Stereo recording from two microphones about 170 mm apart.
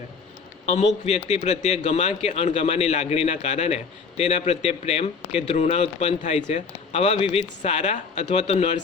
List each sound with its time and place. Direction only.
0.6 s speech: 40° left (ahead or behind)